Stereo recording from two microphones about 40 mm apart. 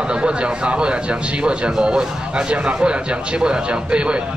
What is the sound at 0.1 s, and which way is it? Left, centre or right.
Speech, right.